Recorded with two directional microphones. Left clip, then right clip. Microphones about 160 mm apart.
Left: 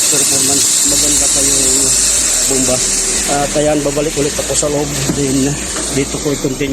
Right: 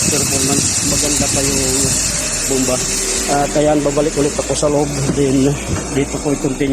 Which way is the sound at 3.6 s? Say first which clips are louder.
Even; 10° right (ahead or behind).